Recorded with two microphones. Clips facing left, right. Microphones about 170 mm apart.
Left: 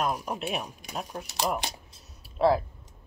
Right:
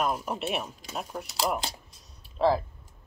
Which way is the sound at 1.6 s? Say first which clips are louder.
Even; 20° left (ahead or behind).